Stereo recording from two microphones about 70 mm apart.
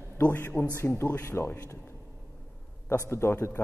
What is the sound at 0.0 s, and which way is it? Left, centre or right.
A man's voice, left.